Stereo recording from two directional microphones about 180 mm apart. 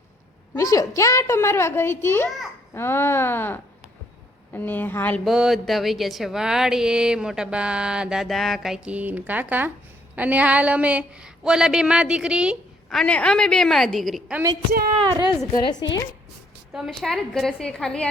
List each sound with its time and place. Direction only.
0.5 s a woman's voice: 20° left (ahead or behind)
5.3 s speech: centre (ahead or behind)
14.9 s speech: 25° right (ahead or behind)
15.5 s a woman's voice: 25° left (ahead or behind)
16.7 s speech: centre (ahead or behind)